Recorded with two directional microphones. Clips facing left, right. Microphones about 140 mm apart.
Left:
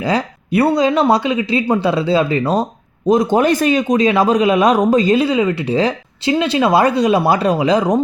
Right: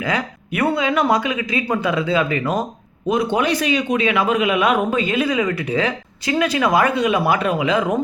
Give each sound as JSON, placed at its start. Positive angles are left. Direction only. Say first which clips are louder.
{"t": 0.0, "sound": "a man's voice", "louder": "left 5 dB", "side_deg": 35}